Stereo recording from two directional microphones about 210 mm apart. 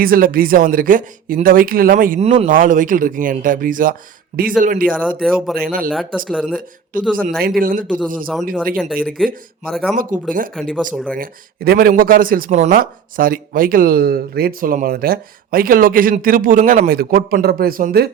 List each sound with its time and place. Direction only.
0.0 s speech: 45° right (ahead or behind)
5.2 s speech: centre (ahead or behind)
7.6 s speech: 40° right (ahead or behind)
8.7 s speech: 5° left (ahead or behind)
9.9 s speech: 40° right (ahead or behind)
10.5 s speech: 5° left (ahead or behind)
11.2 s speech: 45° right (ahead or behind)